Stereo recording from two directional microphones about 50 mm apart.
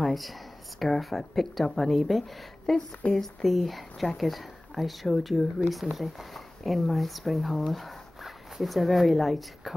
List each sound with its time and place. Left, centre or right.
0.0 s a sound: centre
0.7 s speech: centre
3.0 s speech: left
3.4 s speech: centre